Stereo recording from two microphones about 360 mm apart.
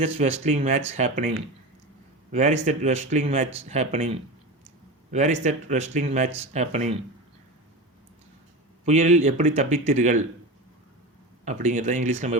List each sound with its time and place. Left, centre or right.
0.0 s speech: centre
8.8 s speech: centre
11.4 s speech: centre